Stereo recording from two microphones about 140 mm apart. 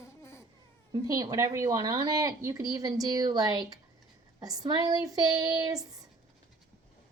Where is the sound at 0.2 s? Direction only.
20° left (ahead or behind).